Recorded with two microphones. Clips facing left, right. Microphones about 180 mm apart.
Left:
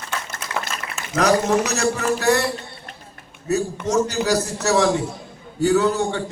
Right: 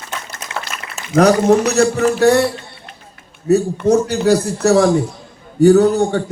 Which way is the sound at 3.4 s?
55° right (ahead or behind).